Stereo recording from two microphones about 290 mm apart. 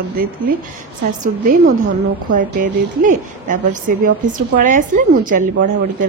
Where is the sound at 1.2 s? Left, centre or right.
Right.